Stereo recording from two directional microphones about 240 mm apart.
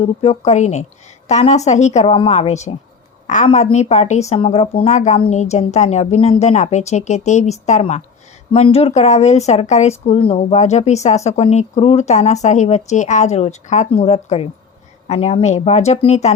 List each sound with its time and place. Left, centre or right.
0.0 s speech: left